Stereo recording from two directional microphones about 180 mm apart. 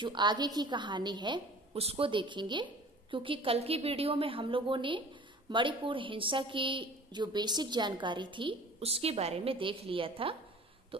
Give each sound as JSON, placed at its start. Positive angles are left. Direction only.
{"t": 0.0, "sound": "a woman's voice", "side_deg": -25}